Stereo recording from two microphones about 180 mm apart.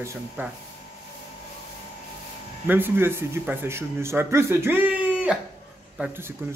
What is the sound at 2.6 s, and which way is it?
A man's voice, 10° right (ahead or behind).